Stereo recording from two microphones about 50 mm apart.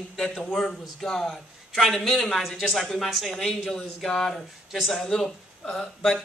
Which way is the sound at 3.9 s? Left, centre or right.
Centre.